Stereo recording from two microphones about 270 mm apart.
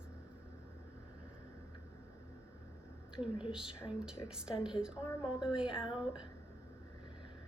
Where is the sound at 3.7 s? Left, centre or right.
Centre.